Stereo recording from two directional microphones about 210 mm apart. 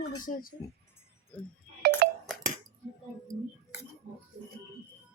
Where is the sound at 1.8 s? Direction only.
45° right (ahead or behind).